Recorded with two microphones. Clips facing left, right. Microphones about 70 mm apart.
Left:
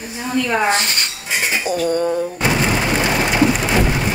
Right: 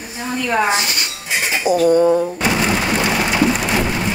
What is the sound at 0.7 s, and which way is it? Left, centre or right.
Speech, left.